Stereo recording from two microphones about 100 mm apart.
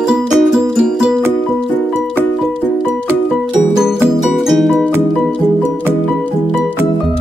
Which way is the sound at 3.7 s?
5° right (ahead or behind).